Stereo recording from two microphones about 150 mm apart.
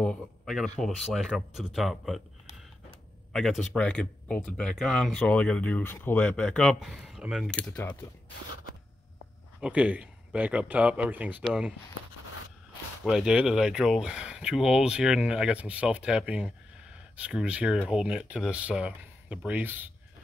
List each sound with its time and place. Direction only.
0.0 s speech: centre (ahead or behind)
3.6 s speech: 5° left (ahead or behind)
7.7 s speech: 10° left (ahead or behind)
9.6 s speech: 10° right (ahead or behind)
13.0 s speech: 5° right (ahead or behind)